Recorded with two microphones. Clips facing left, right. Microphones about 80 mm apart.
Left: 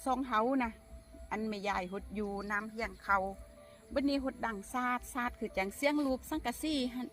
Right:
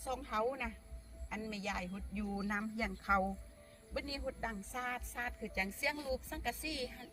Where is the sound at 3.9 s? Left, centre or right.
Left.